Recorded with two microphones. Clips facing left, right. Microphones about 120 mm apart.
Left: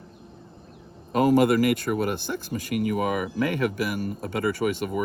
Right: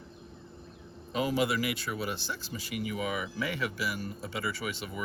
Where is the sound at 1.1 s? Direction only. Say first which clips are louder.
Left 10 dB; 50° left (ahead or behind).